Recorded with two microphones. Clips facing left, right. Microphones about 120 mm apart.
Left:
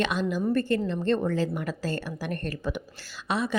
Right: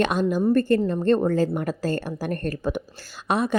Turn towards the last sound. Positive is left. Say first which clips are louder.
# right 5 dB
turn(degrees=-50)  # may be behind; listen again after turning